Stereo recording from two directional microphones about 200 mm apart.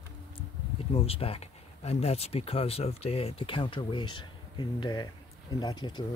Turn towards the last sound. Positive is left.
turn(degrees=20)  # may be behind; listen again after turning